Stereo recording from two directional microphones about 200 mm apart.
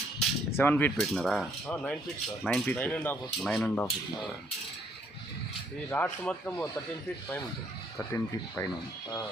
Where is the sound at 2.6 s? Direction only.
5° left (ahead or behind).